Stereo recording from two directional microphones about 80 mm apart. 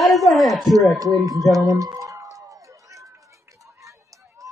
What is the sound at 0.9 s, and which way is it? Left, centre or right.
Speech, right.